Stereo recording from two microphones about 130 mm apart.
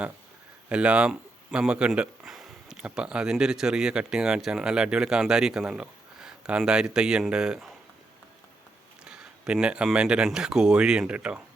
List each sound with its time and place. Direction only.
0.7 s speech: 10° right (ahead or behind)
9.0 s speech: 5° right (ahead or behind)